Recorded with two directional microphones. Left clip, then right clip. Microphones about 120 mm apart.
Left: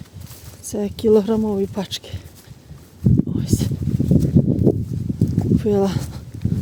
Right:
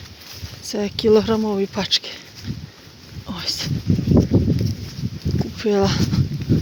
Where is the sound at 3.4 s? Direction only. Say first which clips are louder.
Even; 55° left (ahead or behind).